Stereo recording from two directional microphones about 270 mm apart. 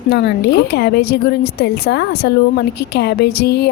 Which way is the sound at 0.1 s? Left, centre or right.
Left.